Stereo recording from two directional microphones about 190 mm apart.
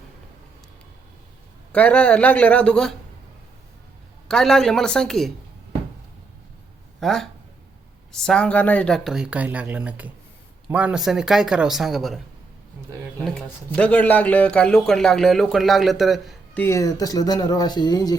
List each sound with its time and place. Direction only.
1.7 s speech: 5° left (ahead or behind)
4.3 s speech: centre (ahead or behind)
7.0 s speech: centre (ahead or behind)
16.6 s speech: 15° left (ahead or behind)